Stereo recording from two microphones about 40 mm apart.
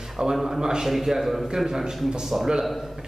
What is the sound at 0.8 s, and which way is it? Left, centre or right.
A man's voice, centre.